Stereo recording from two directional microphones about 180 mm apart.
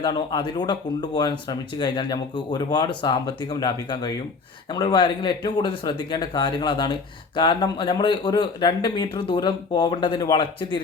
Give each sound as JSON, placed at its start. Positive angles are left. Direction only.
{"t": 0.0, "sound": "speech", "side_deg": 25}